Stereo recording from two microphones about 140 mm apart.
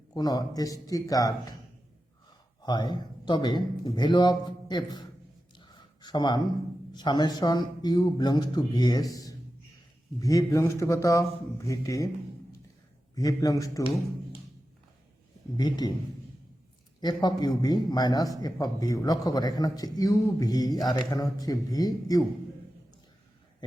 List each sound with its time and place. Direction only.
0.1 s a man's voice: 30° left (ahead or behind)
2.6 s speech: 30° left (ahead or behind)
5.5 s a sound: 30° left (ahead or behind)
6.9 s a man's voice: 30° left (ahead or behind)
13.1 s a man's voice: 25° left (ahead or behind)
15.5 s a man's voice: 30° left (ahead or behind)
17.0 s a man's voice: 30° left (ahead or behind)